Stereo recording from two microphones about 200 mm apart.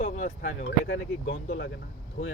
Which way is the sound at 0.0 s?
35° left (ahead or behind).